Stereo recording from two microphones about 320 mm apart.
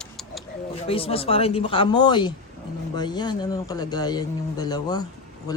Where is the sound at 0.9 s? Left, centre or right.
Centre.